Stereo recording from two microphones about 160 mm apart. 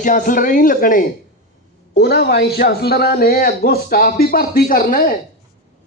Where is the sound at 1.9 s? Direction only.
85° left; by 5.1 s 65° left (ahead or behind).